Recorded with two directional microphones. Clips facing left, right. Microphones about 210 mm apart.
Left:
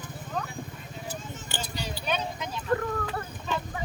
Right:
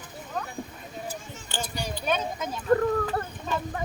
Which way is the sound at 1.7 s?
45° right (ahead or behind).